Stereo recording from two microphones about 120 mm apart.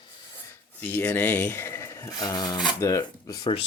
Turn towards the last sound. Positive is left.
turn(degrees=30)  # may be behind; listen again after turning